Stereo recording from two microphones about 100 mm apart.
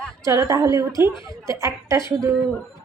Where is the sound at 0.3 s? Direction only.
35° right (ahead or behind).